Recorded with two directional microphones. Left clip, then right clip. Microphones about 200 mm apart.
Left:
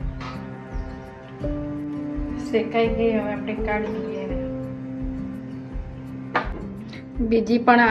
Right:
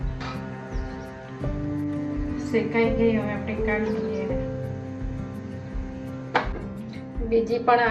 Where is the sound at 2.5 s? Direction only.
45° left (ahead or behind).